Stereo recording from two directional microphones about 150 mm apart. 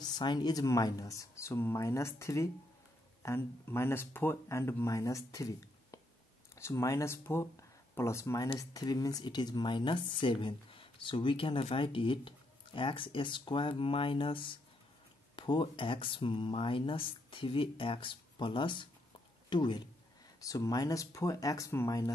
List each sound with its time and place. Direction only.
0.0 s speech: 30° left (ahead or behind)